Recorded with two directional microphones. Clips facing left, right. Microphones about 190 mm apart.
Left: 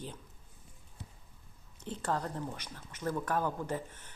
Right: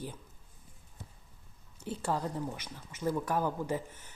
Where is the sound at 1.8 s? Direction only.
10° right (ahead or behind).